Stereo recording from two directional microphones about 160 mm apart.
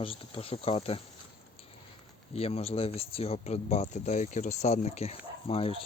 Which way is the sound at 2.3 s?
40° left (ahead or behind).